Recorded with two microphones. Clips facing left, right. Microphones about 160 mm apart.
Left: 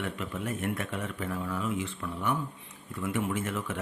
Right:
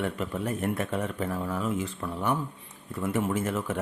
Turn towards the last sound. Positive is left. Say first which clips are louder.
# right 4 dB
turn(degrees=-40)  # may be behind; listen again after turning